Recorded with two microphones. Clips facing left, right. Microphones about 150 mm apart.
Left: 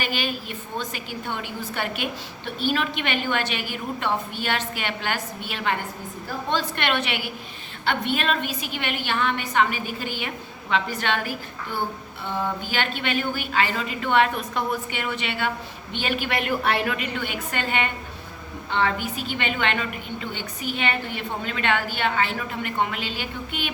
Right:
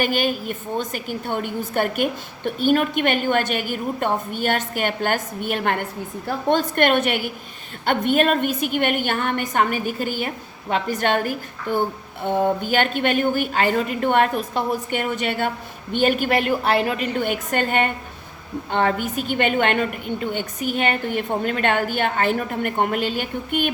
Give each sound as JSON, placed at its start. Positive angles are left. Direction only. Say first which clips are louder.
{"t": 0.0, "sound": "a woman's voice", "louder": "right 7 dB", "side_deg": -50}
{"t": 17.2, "sound": "a woman's voice", "louder": "right 7 dB", "side_deg": -45}